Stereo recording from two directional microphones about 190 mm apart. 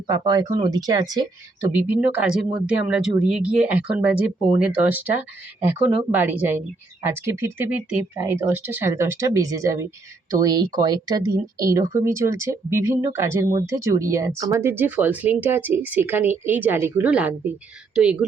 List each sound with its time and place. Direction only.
0.1 s speech: 20° right (ahead or behind)
1.7 s speech: 10° right (ahead or behind)